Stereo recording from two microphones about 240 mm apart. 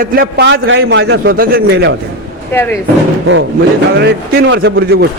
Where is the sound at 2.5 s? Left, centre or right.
Centre.